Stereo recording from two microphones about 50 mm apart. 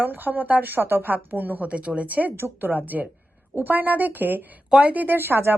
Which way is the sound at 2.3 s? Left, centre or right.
Right.